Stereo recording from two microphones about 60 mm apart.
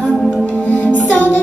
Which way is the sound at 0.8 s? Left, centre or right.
Left.